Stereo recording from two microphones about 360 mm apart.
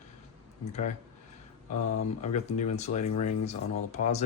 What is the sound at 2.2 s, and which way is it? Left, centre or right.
Speech, centre.